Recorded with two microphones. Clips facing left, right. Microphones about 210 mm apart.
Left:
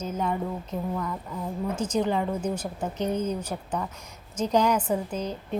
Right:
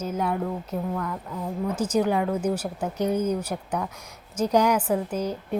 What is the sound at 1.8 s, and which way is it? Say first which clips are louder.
A woman's voice: right 3 dB; 10° right (ahead or behind).